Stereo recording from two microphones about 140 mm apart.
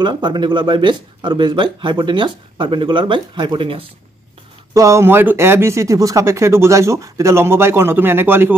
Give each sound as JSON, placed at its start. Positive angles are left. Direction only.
{"t": 0.0, "sound": "speech", "side_deg": -30}
{"t": 4.7, "sound": "speech", "side_deg": -20}